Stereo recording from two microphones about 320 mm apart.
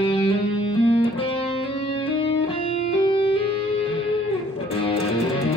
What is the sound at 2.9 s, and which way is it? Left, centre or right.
Music, centre.